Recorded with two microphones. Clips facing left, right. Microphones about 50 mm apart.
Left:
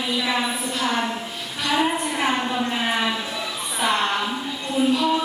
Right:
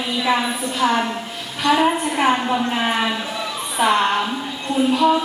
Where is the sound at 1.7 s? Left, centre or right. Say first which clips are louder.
Right 5 dB; centre.